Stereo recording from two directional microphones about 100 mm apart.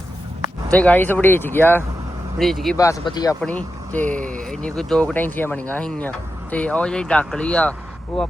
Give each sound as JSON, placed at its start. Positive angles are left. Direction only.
{"t": 0.7, "sound": "speech", "side_deg": 15}
{"t": 2.4, "sound": "speech", "side_deg": 0}
{"t": 2.7, "sound": "speech", "side_deg": 35}
{"t": 3.0, "sound": "speech", "side_deg": 50}
{"t": 3.4, "sound": "speech", "side_deg": 15}
{"t": 5.1, "sound": "speech", "side_deg": 15}